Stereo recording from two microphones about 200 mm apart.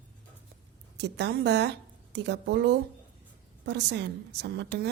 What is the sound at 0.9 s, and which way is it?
A woman's voice, 60° right (ahead or behind).